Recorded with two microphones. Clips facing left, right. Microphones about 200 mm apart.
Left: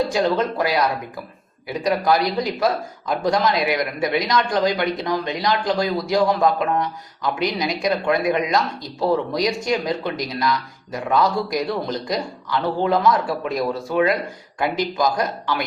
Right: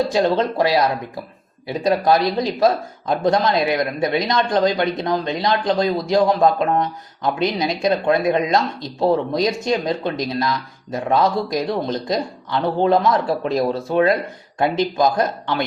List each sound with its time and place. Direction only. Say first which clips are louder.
0.1 s speech: right 2 dB; 25° right (ahead or behind)